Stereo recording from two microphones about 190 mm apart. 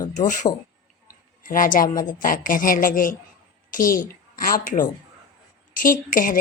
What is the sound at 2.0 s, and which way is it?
A woman's voice, 45° left (ahead or behind).